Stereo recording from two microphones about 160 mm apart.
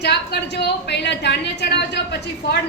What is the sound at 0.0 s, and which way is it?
A woman's voice, 90° left.